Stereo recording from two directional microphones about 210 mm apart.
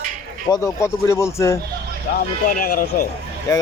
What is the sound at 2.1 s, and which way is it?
Speech, 40° left (ahead or behind).